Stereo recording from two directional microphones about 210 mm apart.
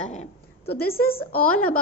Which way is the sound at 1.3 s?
5° left (ahead or behind).